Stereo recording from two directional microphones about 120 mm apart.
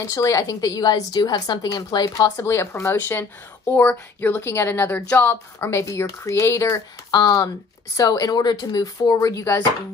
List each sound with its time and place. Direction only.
0.0 s speech: 30° left (ahead or behind)